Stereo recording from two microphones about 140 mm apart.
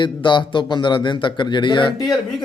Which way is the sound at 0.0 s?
35° left (ahead or behind).